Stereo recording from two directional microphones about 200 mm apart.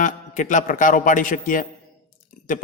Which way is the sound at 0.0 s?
40° left (ahead or behind).